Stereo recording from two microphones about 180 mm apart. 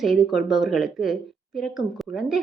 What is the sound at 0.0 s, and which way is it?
A woman's voice, centre (ahead or behind).